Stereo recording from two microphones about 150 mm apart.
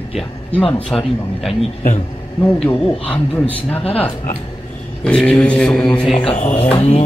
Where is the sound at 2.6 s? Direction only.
5° left (ahead or behind).